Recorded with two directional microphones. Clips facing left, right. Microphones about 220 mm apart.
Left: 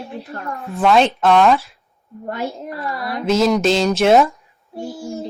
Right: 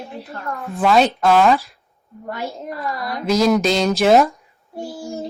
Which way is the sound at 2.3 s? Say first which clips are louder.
Left 2 dB; 35° left (ahead or behind).